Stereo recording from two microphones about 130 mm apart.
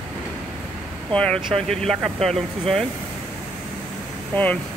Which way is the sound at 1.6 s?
5° left (ahead or behind).